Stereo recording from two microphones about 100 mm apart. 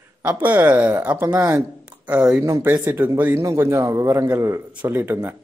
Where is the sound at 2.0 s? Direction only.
10° right (ahead or behind).